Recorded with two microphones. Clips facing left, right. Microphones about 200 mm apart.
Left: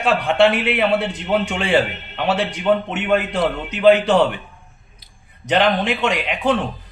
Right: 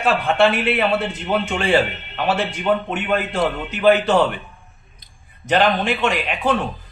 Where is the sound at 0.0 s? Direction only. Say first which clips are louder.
Left 1 dB; 20° left (ahead or behind).